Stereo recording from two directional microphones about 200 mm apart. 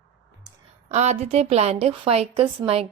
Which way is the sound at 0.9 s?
35° right (ahead or behind).